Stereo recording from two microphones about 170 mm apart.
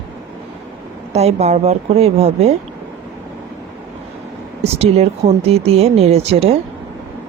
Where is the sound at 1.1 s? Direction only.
40° right (ahead or behind).